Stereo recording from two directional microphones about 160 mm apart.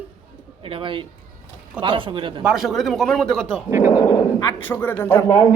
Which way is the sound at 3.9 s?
20° left (ahead or behind).